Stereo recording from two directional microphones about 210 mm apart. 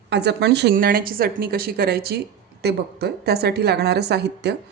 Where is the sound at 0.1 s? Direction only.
55° right (ahead or behind).